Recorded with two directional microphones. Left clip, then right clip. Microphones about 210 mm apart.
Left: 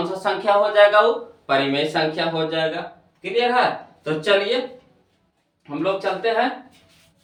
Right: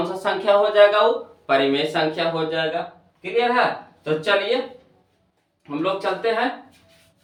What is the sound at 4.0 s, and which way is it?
Speech, 5° left (ahead or behind).